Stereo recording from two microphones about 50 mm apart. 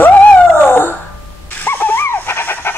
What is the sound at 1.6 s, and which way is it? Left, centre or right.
Dog, left.